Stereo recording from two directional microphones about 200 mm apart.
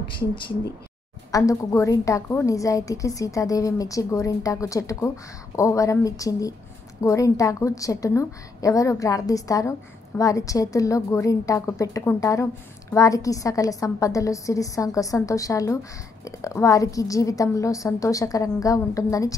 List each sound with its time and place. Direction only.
1.3 s a woman's voice: 15° left (ahead or behind)